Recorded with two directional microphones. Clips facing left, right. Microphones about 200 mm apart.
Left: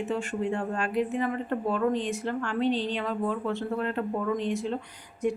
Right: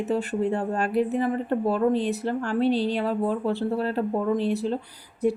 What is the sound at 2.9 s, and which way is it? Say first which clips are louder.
Speech: right 4 dB; 35° right (ahead or behind).